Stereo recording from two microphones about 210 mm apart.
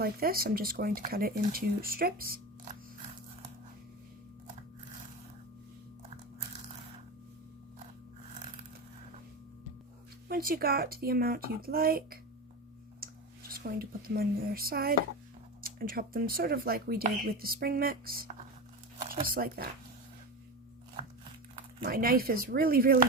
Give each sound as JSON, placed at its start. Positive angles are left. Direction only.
{"t": 0.0, "sound": "speech", "side_deg": -45}
{"t": 10.2, "sound": "speech", "side_deg": -45}
{"t": 13.5, "sound": "speech", "side_deg": -45}
{"t": 21.8, "sound": "speech", "side_deg": -45}